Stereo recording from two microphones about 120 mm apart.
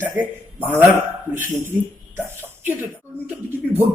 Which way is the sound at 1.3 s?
15° right (ahead or behind).